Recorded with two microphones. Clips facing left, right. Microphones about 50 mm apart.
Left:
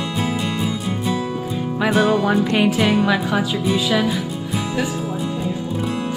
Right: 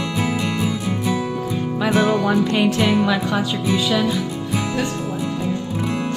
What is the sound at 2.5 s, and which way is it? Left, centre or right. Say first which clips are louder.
Speech: left 1 dB; centre.